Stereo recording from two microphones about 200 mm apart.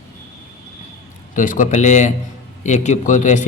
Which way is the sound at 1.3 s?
40° left (ahead or behind).